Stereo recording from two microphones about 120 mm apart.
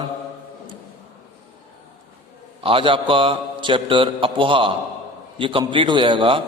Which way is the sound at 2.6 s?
45° right (ahead or behind).